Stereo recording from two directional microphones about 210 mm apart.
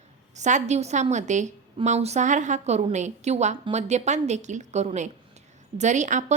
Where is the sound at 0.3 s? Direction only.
35° right (ahead or behind).